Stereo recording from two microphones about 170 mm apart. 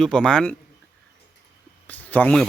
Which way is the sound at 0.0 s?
5° left (ahead or behind).